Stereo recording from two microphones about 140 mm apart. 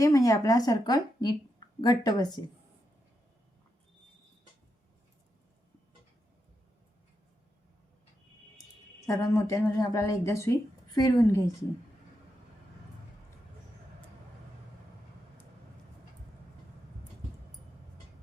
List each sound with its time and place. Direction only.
0.0 s a woman's voice: 25° left (ahead or behind)
9.0 s a woman's voice: 25° left (ahead or behind)